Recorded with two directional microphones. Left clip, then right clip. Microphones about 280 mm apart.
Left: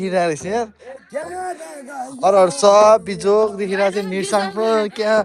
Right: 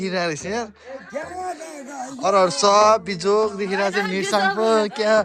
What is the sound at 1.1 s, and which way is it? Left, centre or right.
Speech, left.